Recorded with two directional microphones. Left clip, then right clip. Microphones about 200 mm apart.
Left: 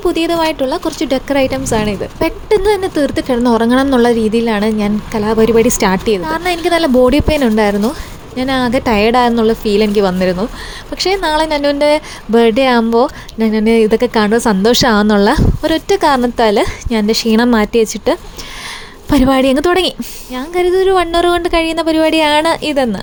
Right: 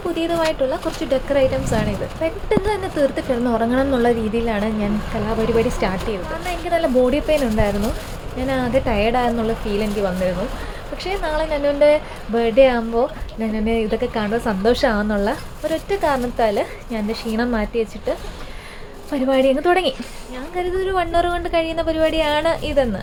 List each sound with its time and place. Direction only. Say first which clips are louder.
0.1 s a woman's voice: left 3 dB; 45° left (ahead or behind)